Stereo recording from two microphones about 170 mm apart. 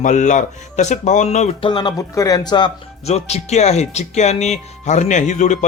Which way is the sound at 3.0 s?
40° left (ahead or behind).